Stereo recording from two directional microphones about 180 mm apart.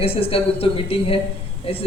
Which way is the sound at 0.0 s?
30° left (ahead or behind).